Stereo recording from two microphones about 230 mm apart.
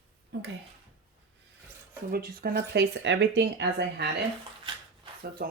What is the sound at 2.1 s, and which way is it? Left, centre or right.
Speech, right.